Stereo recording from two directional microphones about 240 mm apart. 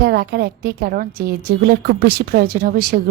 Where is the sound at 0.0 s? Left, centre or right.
Right.